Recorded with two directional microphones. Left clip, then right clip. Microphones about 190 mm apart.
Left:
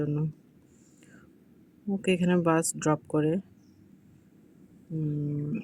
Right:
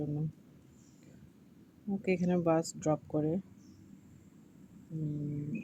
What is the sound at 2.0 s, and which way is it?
Speech, 40° left (ahead or behind).